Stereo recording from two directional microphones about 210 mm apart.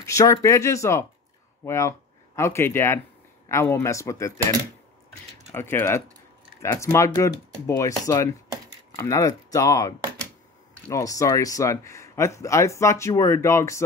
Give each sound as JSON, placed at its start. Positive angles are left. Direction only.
{"t": 0.0, "sound": "speech", "side_deg": 15}
{"t": 5.5, "sound": "speech", "side_deg": 10}